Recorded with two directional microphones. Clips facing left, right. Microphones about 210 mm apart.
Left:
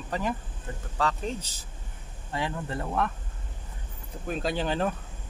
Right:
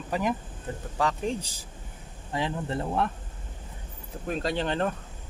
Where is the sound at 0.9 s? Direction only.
15° right (ahead or behind).